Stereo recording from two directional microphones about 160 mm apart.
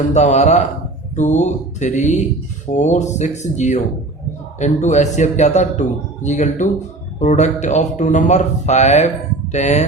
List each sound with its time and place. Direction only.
0.1 s speech: 45° left (ahead or behind)